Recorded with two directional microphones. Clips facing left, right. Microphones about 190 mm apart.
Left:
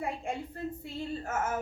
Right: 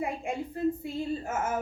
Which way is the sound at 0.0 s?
15° right (ahead or behind).